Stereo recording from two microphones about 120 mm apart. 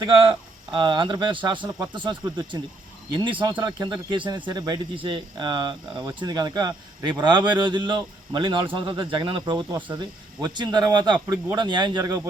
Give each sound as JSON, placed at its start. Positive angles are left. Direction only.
{"t": 0.2, "sound": "speech", "side_deg": -45}